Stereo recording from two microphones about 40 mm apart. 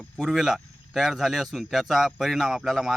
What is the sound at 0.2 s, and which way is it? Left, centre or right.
Speech, centre.